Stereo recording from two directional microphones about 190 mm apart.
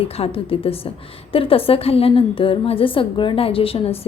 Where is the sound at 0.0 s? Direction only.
30° left (ahead or behind).